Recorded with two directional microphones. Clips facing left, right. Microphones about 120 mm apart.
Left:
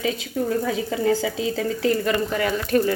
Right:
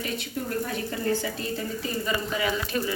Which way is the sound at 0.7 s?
90° left.